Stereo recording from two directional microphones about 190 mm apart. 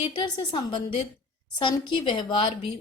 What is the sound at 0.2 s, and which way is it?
A woman's voice, 25° left (ahead or behind).